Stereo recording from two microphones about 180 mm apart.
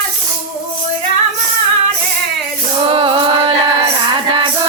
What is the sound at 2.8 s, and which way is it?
Music, 30° right (ahead or behind).